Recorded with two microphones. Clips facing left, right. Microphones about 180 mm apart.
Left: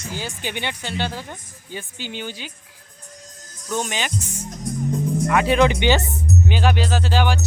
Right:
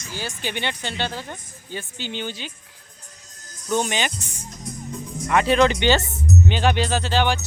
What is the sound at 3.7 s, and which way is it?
Music, centre (ahead or behind).